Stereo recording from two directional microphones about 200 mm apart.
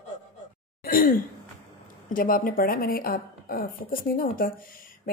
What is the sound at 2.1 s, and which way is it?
Speech, 45° left (ahead or behind).